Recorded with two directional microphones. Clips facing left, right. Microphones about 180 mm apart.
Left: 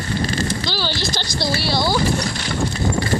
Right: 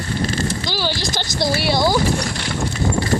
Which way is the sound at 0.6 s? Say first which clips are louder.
Right 1 dB; 15° right (ahead or behind).